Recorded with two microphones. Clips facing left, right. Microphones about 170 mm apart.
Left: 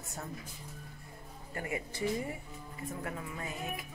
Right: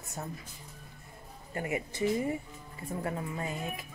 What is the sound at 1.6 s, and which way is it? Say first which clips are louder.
Speech: right 4 dB; 20° right (ahead or behind).